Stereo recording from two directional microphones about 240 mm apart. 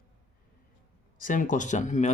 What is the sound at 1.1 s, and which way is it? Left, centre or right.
Speech, left.